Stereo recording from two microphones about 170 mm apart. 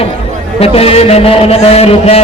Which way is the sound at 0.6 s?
35° left (ahead or behind).